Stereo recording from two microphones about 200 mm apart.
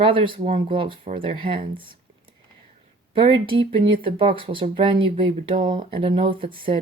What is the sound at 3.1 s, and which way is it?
Speech, 25° right (ahead or behind).